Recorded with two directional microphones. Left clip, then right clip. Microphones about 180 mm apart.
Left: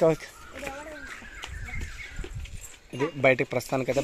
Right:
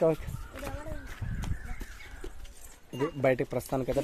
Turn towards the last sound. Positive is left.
turn(degrees=0)  # may be behind; listen again after turning